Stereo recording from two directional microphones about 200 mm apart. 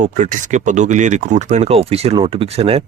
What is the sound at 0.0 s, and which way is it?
Speech, 40° right (ahead or behind).